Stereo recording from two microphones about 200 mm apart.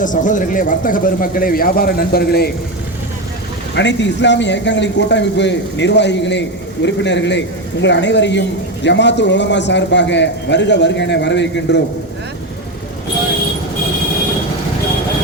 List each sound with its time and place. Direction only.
0.0 s speech: 40° left (ahead or behind)
3.8 s a man's voice: 60° left (ahead or behind)